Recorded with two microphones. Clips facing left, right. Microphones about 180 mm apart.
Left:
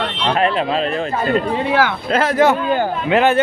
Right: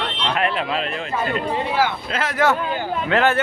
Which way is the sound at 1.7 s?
75° left (ahead or behind).